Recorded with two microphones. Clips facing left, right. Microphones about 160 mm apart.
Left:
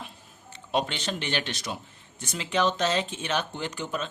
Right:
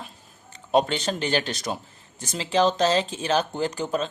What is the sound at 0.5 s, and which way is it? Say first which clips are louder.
Speech: right 7 dB; 40° right (ahead or behind).